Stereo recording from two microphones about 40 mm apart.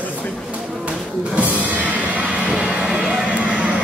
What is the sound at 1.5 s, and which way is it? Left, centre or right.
Music, right.